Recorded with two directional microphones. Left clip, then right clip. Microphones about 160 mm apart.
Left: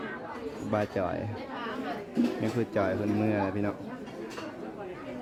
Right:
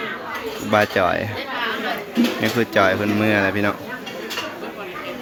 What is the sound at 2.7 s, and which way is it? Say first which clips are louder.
Speech: right 12 dB; 10° left (ahead or behind).